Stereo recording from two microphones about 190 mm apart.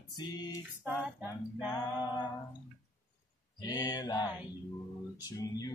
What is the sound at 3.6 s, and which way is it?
Music, 20° left (ahead or behind).